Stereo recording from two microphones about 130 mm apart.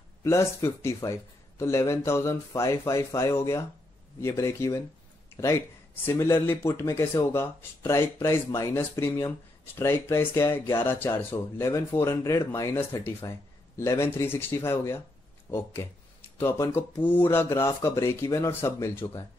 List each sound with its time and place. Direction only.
0.2 s speech: 25° left (ahead or behind)